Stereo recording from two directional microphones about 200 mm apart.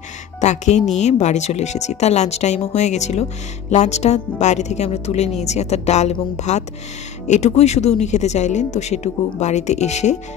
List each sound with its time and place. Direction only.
0.4 s speech: 35° left (ahead or behind)